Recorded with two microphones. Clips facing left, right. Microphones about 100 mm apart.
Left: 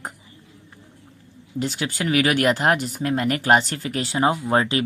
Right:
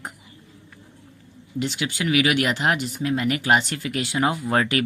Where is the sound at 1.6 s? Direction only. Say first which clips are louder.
Left 1 dB; 40° left (ahead or behind).